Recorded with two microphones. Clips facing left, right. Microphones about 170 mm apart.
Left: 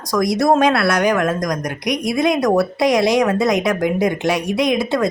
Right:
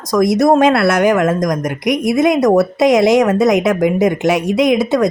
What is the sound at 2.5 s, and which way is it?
Speech, 20° right (ahead or behind).